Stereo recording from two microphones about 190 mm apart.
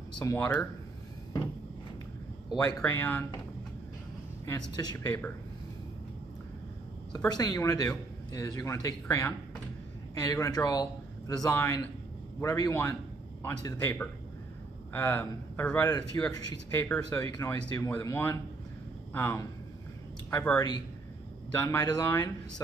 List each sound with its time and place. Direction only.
0.2 s a man's voice: 15° left (ahead or behind)
2.5 s a man's voice: 15° left (ahead or behind)
4.7 s a man's voice: 15° left (ahead or behind)
7.2 s a man's voice: 20° left (ahead or behind)
10.3 s a man's voice: 20° left (ahead or behind)